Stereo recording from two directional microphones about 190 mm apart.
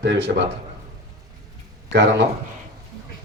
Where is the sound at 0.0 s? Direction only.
65° right (ahead or behind).